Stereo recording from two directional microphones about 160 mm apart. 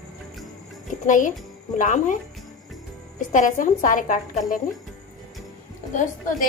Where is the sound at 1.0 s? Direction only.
55° left (ahead or behind).